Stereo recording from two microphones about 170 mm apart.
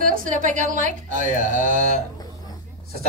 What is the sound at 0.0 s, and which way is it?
Speech, 55° right (ahead or behind).